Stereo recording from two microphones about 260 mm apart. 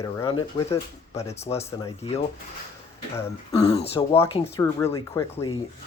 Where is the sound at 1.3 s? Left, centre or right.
Left.